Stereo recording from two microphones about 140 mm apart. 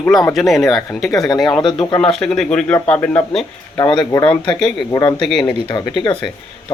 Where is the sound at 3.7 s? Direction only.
30° left (ahead or behind).